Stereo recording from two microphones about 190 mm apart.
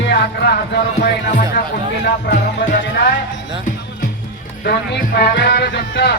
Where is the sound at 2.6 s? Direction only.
70° left (ahead or behind).